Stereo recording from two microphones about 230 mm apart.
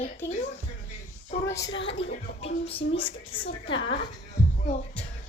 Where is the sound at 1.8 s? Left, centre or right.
Left.